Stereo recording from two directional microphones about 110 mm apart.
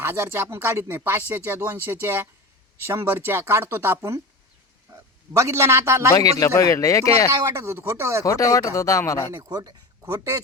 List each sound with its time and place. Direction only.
0.0 s speech: 25° right (ahead or behind)
4.9 s a sound: 40° right (ahead or behind)
5.4 s speech: 25° right (ahead or behind)
6.4 s speech: 30° left (ahead or behind)
7.3 s speech: 30° right (ahead or behind)
8.2 s speech: 30° left (ahead or behind)
9.3 s speech: 35° right (ahead or behind)